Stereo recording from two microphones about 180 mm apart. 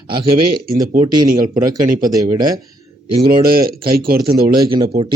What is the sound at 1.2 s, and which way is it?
Speech, 50° right (ahead or behind).